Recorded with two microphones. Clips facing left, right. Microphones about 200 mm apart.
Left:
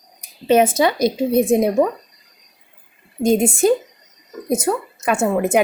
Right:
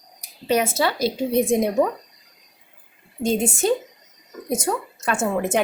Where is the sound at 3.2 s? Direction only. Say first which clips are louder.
Left 5 dB; 10° left (ahead or behind).